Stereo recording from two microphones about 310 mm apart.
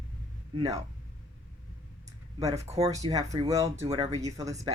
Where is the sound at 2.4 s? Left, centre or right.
Centre.